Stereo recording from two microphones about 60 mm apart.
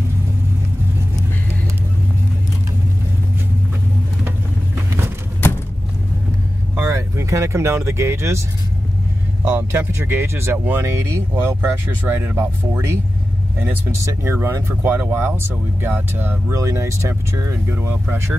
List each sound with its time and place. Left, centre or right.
5.4 s a sound: left
6.8 s speech: right
9.4 s speech: right
13.9 s speech: right
14.9 s speech: right
16.5 s speech: right
17.6 s speech: right